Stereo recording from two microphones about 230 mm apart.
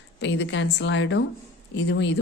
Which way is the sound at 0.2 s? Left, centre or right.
Left.